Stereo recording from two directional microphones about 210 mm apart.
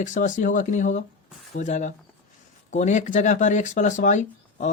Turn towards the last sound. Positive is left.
turn(degrees=35)  # may be behind; listen again after turning